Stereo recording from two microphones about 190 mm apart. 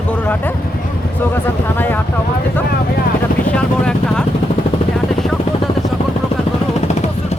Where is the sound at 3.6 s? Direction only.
5° left (ahead or behind).